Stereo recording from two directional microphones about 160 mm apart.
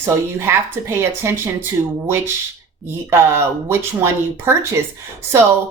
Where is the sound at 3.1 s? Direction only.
15° right (ahead or behind).